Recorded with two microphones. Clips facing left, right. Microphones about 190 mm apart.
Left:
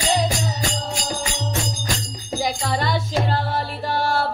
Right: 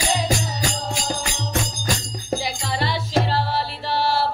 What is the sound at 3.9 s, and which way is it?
Mantra, 50° left (ahead or behind).